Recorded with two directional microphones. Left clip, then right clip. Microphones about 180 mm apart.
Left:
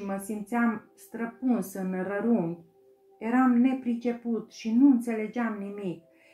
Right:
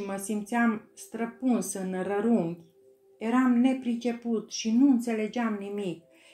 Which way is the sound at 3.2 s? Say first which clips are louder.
Left 1 dB; 55° right (ahead or behind).